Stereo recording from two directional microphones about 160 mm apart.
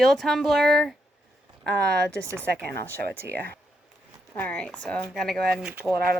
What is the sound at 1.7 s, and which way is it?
Speech, 90° right.